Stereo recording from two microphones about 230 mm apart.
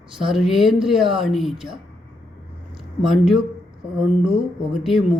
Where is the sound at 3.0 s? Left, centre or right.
Centre.